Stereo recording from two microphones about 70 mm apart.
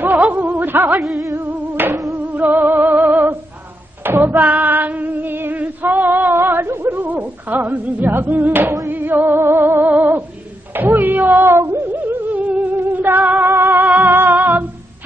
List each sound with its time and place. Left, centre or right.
0.0 s music: right
0.9 s music: centre
1.3 s music: right
4.0 s female singing: right
7.8 s music: right
10.7 s a sound: right
11.9 s music: right